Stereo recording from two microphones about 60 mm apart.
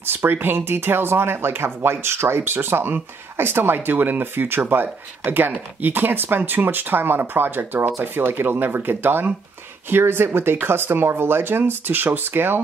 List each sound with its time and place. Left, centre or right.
0.0 s speech: right